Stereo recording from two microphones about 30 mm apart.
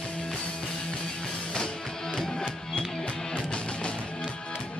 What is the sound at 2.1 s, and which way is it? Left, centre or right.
Music, left.